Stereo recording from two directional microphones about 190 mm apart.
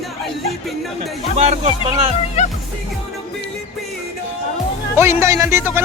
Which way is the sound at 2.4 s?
35° left (ahead or behind).